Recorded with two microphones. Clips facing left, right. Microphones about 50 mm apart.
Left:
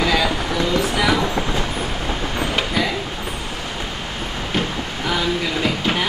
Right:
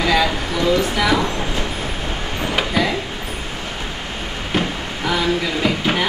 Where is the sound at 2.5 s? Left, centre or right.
Centre.